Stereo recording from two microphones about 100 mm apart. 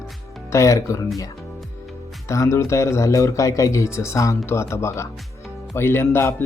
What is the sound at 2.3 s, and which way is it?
A man's voice, 30° left (ahead or behind).